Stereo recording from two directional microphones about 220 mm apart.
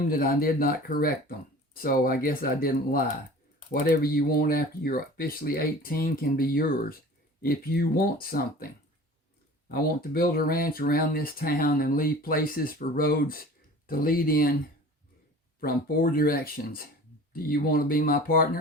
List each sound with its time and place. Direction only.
0.1 s speech: 40° left (ahead or behind)
9.7 s speech: 40° left (ahead or behind)
15.6 s speech: 40° left (ahead or behind)